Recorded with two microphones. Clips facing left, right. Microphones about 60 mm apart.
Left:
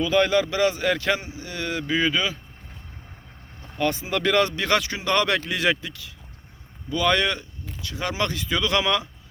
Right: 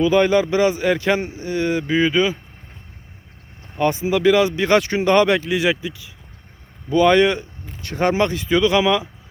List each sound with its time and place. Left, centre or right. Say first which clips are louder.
0.0 s speech: right 5 dB; centre
1.2 s speech: right 9 dB; right
3.8 s speech: right 7 dB; centre
4.5 s speech: right 7 dB; right
5.1 s speech: right 6 dB; centre
6.9 s speech: right 8 dB; right
7.8 s speech: right 10 dB; right
8.2 s speech: right 4 dB; right
8.8 s speech: right 6 dB; centre